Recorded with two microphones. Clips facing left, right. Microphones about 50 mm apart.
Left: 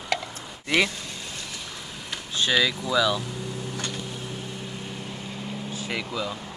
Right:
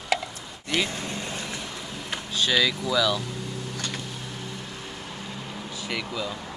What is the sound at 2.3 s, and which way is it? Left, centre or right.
Vehicle, centre.